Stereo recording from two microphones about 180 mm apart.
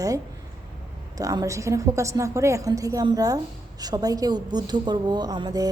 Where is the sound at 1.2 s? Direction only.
20° right (ahead or behind).